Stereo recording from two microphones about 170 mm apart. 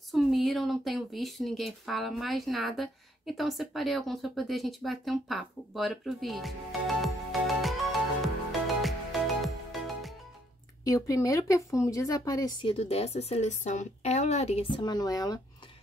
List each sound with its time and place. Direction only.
0.1 s speech: centre (ahead or behind)
7.0 s music: centre (ahead or behind)
10.8 s speech: 20° left (ahead or behind)
12.7 s a woman's voice: 35° left (ahead or behind); by 15.4 s 20° left (ahead or behind)